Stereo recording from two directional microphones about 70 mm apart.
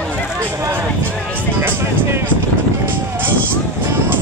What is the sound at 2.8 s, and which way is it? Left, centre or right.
Music, right.